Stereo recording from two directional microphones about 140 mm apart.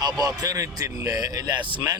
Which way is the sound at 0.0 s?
25° right (ahead or behind).